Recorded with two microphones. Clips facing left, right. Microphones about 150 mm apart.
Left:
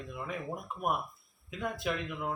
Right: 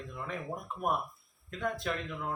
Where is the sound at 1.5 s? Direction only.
5° left (ahead or behind).